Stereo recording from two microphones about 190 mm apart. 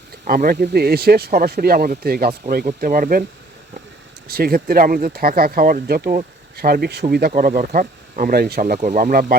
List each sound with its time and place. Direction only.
0.3 s speech: 50° right (ahead or behind)
4.3 s speech: 55° right (ahead or behind)